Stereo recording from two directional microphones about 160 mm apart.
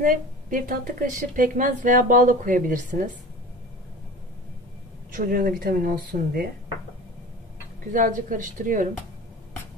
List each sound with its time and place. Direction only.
0.0 s a woman's voice: 60° right (ahead or behind)
5.1 s a woman's voice: 60° right (ahead or behind)
7.9 s a woman's voice: 55° right (ahead or behind)